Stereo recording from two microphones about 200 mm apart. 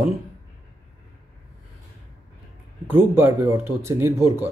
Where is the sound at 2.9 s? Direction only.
10° right (ahead or behind).